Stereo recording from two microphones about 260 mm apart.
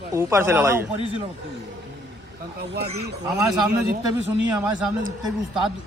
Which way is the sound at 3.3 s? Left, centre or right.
Centre.